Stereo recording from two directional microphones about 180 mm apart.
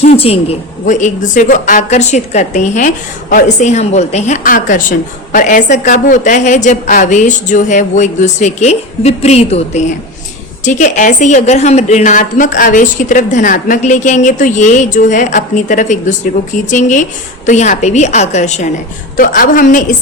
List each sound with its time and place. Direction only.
0.0 s a woman's voice: 35° left (ahead or behind)